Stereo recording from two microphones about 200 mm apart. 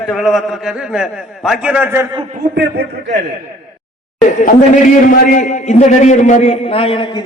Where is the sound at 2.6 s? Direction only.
55° right (ahead or behind).